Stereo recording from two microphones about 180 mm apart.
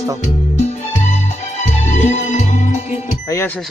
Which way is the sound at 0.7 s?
40° left (ahead or behind).